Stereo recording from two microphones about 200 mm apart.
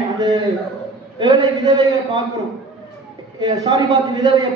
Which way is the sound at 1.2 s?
20° right (ahead or behind).